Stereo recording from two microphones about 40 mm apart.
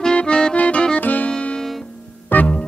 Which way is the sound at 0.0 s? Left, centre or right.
Left.